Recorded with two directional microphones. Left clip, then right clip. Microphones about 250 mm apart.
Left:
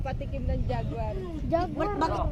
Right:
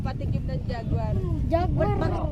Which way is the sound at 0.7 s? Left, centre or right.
Right.